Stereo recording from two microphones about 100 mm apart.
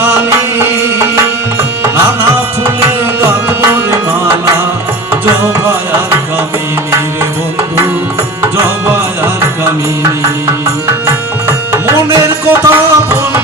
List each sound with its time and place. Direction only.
5.2 s music: 25° right (ahead or behind)
8.5 s music: 20° right (ahead or behind)
12.2 s music: 25° right (ahead or behind)